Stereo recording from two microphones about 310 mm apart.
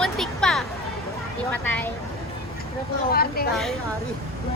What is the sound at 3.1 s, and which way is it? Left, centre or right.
Speech, left.